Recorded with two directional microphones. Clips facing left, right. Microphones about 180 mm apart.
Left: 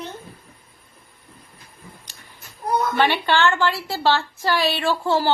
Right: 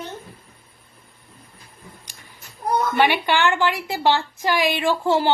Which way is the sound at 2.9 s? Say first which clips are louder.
Right 1 dB; 15° right (ahead or behind).